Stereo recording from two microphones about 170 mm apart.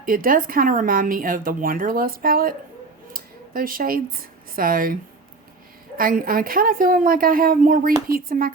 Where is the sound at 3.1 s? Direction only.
55° right (ahead or behind).